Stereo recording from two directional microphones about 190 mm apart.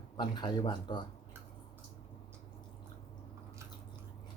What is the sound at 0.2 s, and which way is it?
Speech, 25° left (ahead or behind).